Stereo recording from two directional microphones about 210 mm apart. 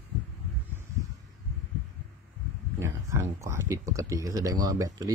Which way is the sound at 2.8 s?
10° right (ahead or behind).